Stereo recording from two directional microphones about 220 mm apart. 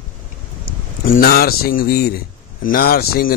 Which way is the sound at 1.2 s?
45° left (ahead or behind).